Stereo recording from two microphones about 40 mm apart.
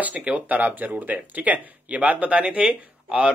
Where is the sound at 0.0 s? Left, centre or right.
Right.